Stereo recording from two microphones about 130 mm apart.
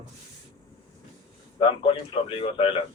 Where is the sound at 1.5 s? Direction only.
40° left (ahead or behind).